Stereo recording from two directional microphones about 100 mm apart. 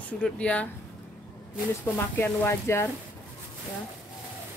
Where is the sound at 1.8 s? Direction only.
20° left (ahead or behind).